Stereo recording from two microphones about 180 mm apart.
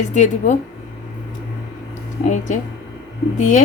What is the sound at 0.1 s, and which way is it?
Speech, 40° left (ahead or behind).